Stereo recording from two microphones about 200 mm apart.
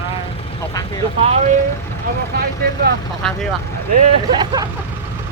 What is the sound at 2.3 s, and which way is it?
Speech, 50° right (ahead or behind).